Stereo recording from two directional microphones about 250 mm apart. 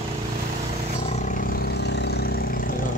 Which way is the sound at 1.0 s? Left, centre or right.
Left.